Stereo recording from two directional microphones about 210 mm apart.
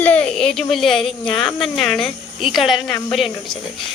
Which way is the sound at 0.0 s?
5° left (ahead or behind).